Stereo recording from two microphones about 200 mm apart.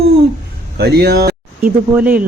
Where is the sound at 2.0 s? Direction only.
5° right (ahead or behind).